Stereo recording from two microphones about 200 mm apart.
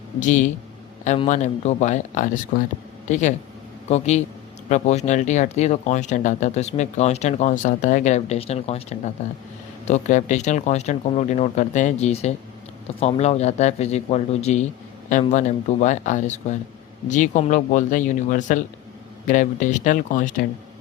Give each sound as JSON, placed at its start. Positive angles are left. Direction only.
{"t": 0.2, "sound": "speech", "side_deg": 40}